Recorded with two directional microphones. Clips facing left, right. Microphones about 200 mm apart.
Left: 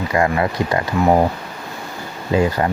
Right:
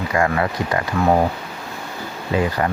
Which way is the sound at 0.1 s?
25° left (ahead or behind).